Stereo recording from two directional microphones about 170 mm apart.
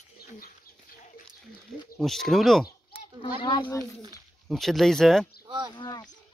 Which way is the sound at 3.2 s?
25° left (ahead or behind).